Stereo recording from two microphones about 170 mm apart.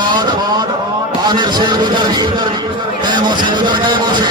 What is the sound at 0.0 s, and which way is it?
Vehicle, 25° right (ahead or behind).